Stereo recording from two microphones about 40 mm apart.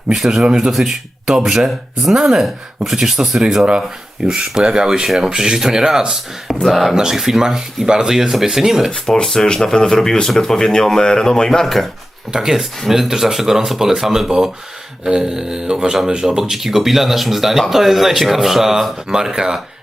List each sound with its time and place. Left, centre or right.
0.2 s speech: centre
4.9 s speech: centre
6.7 s speech: centre
6.9 s speech: centre
8.9 s speech: left
9.2 s speech: centre
12.3 s speech: centre